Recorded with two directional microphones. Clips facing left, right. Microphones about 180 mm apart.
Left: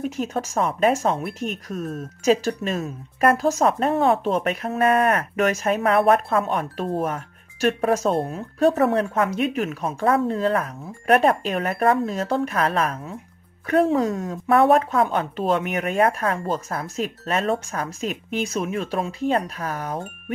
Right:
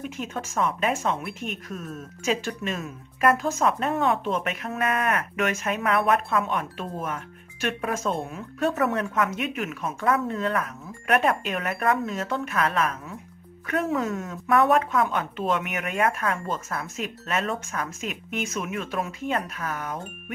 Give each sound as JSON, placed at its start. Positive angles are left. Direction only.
{"t": 0.0, "sound": "speech", "side_deg": 40}